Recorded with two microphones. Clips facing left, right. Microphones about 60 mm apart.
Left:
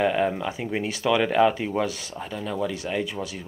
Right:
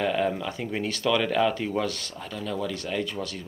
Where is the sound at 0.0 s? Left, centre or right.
Centre.